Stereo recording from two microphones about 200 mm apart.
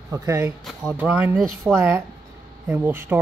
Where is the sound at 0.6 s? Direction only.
Centre (ahead or behind).